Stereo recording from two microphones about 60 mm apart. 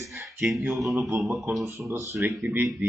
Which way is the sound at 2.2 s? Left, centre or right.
Right.